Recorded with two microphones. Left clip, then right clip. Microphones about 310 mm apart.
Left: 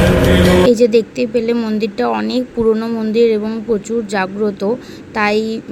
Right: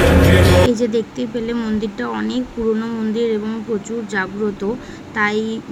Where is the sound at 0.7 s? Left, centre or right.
Centre.